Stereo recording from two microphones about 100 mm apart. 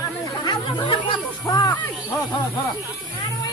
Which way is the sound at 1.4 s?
40° left (ahead or behind).